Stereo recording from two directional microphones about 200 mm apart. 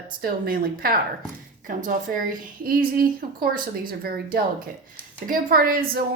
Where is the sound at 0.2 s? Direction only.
45° right (ahead or behind).